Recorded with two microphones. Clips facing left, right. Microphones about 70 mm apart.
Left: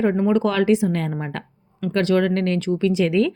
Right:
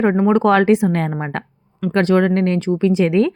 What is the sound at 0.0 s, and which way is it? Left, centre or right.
A woman's voice, right.